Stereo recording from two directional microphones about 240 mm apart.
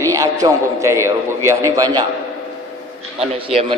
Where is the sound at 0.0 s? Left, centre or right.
Centre.